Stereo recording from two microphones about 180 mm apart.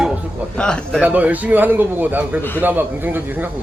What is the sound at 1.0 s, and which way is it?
A man's voice, 10° right (ahead or behind).